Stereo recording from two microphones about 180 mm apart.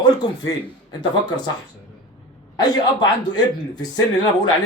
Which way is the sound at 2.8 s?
25° left (ahead or behind).